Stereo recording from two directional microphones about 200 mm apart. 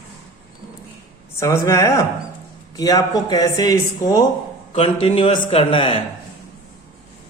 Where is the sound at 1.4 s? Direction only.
15° left (ahead or behind).